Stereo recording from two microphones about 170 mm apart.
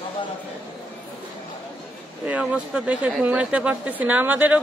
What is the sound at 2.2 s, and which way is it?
Speech, 5° right (ahead or behind).